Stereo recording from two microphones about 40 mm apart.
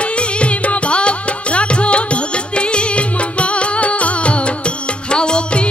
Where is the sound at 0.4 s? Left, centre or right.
Left.